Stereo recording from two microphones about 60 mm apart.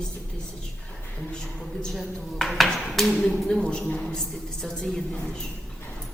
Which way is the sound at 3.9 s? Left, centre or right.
Centre.